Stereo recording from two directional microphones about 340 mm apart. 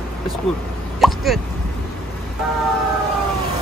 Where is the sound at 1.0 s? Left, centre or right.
Centre.